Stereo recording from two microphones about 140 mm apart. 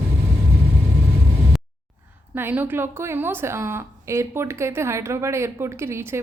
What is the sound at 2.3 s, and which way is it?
A woman's voice, 15° right (ahead or behind).